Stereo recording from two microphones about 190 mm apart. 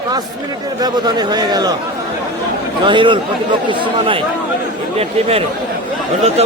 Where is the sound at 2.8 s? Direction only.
25° right (ahead or behind).